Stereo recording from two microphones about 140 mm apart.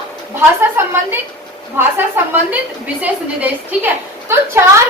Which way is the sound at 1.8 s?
15° right (ahead or behind).